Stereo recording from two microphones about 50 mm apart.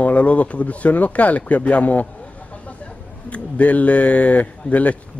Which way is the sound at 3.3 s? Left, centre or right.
Left.